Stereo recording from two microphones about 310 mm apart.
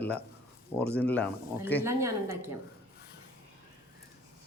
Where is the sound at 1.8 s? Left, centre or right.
Centre.